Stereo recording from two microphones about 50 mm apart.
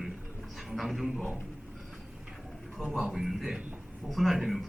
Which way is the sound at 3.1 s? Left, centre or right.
Centre.